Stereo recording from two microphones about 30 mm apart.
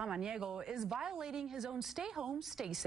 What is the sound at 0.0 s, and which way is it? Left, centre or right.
A woman's voice, right.